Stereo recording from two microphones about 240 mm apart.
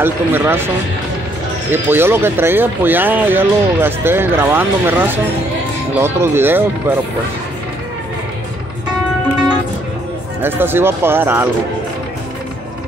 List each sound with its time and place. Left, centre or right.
0.0 s speech: centre
1.7 s speech: centre
10.4 s speech: centre